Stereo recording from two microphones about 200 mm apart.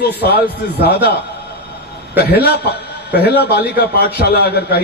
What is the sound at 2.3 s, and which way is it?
A man's voice, 55° left (ahead or behind).